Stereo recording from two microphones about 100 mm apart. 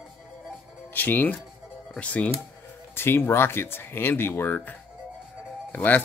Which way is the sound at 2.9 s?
25° left (ahead or behind).